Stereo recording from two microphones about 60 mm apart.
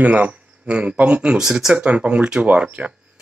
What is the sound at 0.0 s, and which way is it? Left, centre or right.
Speech, right.